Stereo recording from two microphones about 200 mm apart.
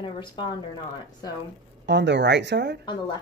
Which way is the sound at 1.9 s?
60° right (ahead or behind).